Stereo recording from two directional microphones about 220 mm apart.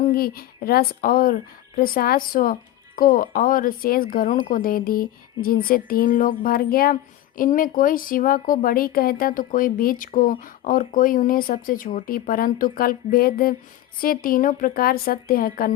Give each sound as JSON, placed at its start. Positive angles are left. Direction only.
{"t": 0.0, "sound": "speech", "side_deg": 45}